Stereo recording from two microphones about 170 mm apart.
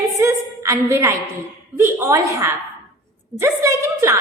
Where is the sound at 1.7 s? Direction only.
15° right (ahead or behind).